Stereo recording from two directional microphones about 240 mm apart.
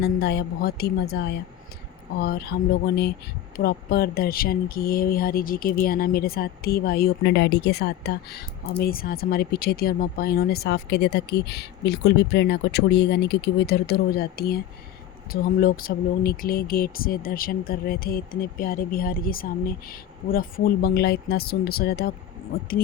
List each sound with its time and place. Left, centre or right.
0.0 s speech: left